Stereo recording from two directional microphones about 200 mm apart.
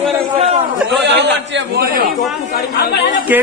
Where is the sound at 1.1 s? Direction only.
55° right (ahead or behind).